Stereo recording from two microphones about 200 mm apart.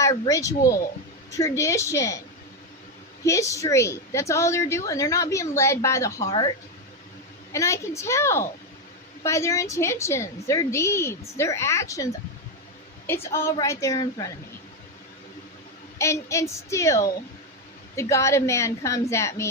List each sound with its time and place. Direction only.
0.0 s a woman's voice: 15° left (ahead or behind)
3.2 s a woman's voice: 15° left (ahead or behind)
7.5 s a woman's voice: 15° left (ahead or behind)
13.1 s a woman's voice: 10° left (ahead or behind)
16.0 s a woman's voice: 15° left (ahead or behind)